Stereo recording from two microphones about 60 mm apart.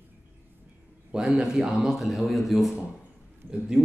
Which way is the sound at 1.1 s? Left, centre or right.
Centre.